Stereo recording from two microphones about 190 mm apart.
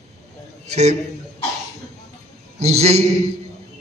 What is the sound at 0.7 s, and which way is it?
Speech, 35° right (ahead or behind).